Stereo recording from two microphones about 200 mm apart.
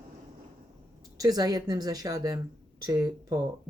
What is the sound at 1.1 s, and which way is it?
Speech, 20° right (ahead or behind).